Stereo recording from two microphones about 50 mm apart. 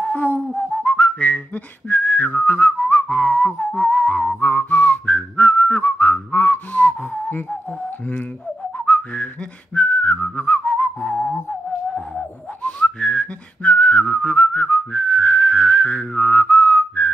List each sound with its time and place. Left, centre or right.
0.0 s a sound: left
0.5 s whistling: centre
0.8 s whistling: left
6.3 s whistling: left
8.7 s whistling: left
12.6 s whistling: left